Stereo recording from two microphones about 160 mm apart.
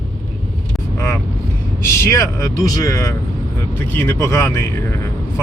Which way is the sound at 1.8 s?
15° left (ahead or behind).